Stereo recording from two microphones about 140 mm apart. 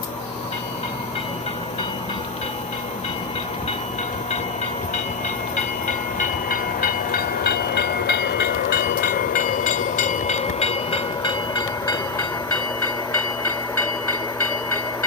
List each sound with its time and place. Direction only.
6.1 s train: 80° left
8.7 s train: 80° left; by 12.2 s 30° left (ahead or behind)